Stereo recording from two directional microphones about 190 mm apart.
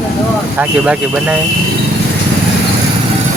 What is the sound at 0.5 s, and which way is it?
Speech, 5° right (ahead or behind).